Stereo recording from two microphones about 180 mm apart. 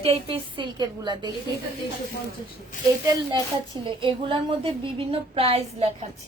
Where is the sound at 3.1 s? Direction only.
25° right (ahead or behind).